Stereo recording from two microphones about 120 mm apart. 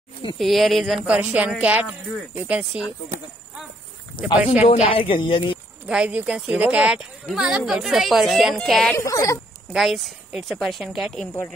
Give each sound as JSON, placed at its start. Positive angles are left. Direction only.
{"t": 0.4, "sound": "speech", "side_deg": 0}
{"t": 4.6, "sound": "speech", "side_deg": 50}
{"t": 5.9, "sound": "speech", "side_deg": -10}
{"t": 8.9, "sound": "speech", "side_deg": 25}
{"t": 9.7, "sound": "speech", "side_deg": 0}